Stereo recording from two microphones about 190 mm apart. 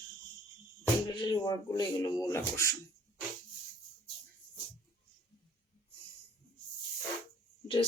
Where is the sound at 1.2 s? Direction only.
25° left (ahead or behind).